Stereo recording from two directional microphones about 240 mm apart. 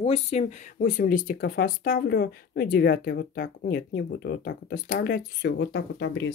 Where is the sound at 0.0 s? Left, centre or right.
Left.